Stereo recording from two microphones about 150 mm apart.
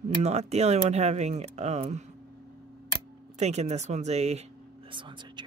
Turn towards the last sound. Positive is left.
turn(degrees=-35)  # may be behind; listen again after turning